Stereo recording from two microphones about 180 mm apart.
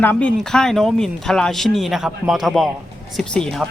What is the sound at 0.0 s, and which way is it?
Speech, 10° left (ahead or behind).